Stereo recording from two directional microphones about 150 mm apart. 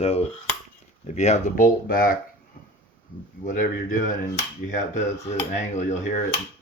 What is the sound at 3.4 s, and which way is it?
Speech, 60° left (ahead or behind).